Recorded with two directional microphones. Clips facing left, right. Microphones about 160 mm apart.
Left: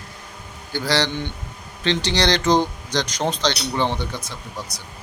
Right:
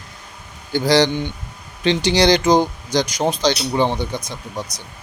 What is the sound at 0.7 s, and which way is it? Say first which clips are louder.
Speech: right 7 dB; 15° right (ahead or behind).